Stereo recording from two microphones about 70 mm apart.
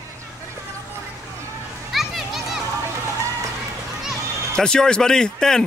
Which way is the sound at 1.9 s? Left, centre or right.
Centre.